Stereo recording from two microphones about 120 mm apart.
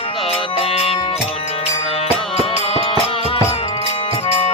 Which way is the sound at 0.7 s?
55° left (ahead or behind).